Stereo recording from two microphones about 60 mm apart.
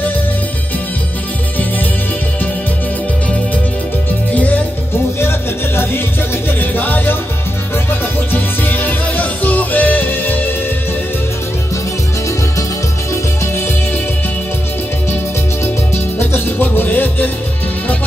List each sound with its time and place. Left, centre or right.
4.3 s music: left
6.6 s music: left
8.3 s music: left
16.2 s music: left